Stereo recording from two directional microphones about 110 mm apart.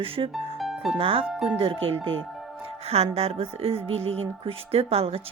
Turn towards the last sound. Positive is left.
turn(degrees=-65)  # may be behind; listen again after turning